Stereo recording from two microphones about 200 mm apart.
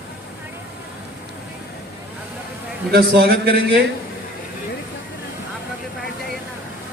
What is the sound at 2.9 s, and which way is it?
Speech, 50° right (ahead or behind).